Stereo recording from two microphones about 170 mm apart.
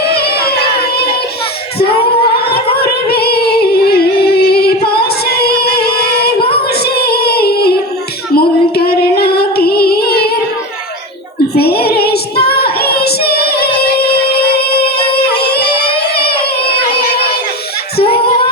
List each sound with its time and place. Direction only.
0.1 s a sound: 65° left (ahead or behind)
2.7 s singing: 70° left (ahead or behind)
6.5 s a sound: 70° left (ahead or behind)
8.4 s female singing: 65° left (ahead or behind)
11.5 s child singing: 65° left (ahead or behind)
13.8 s music: 70° left (ahead or behind)